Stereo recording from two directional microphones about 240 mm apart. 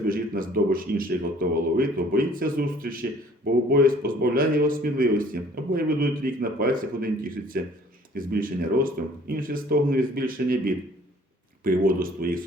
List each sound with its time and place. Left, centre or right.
0.1 s speech: right